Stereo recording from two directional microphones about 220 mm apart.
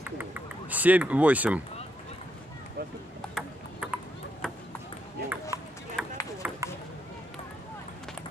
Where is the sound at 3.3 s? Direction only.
5° right (ahead or behind).